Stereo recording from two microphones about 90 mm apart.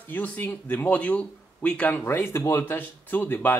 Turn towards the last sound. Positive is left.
turn(degrees=20)  # may be behind; listen again after turning